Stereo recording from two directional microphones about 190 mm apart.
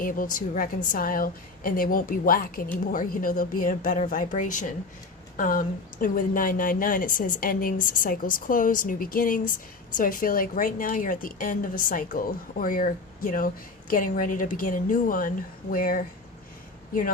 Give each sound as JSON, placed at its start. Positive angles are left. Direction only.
{"t": 0.0, "sound": "a woman's voice", "side_deg": 45}